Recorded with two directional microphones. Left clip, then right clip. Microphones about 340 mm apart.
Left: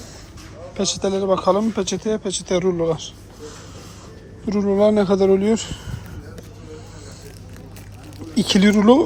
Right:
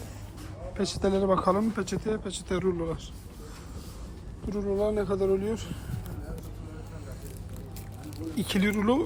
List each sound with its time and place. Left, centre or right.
1.0 s speech: centre
4.4 s a woman's voice: left
8.4 s speech: centre